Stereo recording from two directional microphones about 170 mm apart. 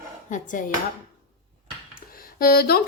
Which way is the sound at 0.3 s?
50° left (ahead or behind).